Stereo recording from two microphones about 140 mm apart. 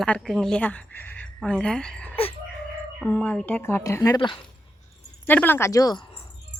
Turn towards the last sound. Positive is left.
turn(degrees=30)  # may be behind; listen again after turning